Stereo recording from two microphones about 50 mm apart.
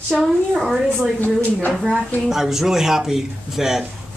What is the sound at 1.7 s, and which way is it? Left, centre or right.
Speech, centre.